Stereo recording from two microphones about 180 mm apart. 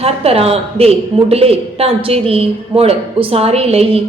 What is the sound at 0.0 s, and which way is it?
A man's voice, 35° right (ahead or behind).